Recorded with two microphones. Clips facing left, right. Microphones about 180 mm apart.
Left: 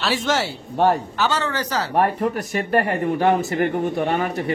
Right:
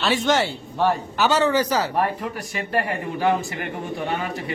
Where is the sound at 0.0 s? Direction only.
Centre (ahead or behind).